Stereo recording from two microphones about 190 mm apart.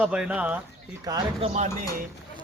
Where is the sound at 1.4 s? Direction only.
35° right (ahead or behind).